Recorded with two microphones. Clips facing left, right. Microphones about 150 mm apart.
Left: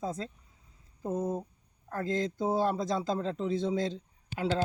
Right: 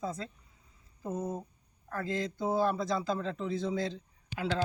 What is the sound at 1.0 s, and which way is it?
A man's voice, 30° left (ahead or behind).